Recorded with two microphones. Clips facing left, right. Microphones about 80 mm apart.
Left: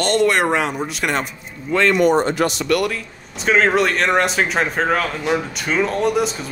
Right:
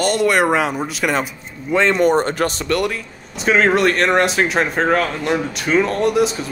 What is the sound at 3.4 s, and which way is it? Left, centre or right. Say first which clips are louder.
Speech: right 1 dB; centre.